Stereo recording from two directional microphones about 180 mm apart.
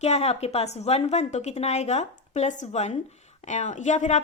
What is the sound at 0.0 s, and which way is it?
Speech, 35° left (ahead or behind).